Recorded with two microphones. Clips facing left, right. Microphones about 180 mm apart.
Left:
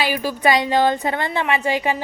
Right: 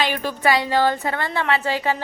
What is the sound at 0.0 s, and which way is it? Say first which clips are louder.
Speech: left 1 dB; 10° left (ahead or behind).